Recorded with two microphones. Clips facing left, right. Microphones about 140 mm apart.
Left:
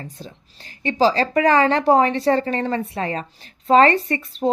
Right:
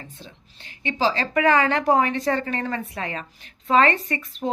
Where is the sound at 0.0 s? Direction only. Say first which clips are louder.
Left 6 dB; 40° left (ahead or behind).